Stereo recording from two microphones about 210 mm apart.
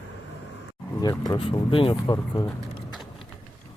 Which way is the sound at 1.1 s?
20° left (ahead or behind).